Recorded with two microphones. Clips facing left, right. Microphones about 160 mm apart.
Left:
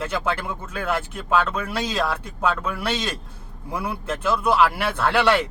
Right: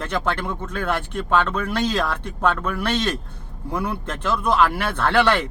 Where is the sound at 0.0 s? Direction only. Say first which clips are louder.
Right 1 dB; 5° left (ahead or behind).